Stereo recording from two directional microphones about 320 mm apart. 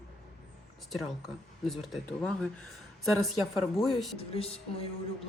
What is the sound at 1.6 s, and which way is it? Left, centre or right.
Speech, centre.